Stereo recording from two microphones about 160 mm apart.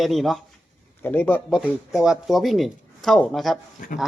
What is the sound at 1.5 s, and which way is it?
Speech, 5° right (ahead or behind).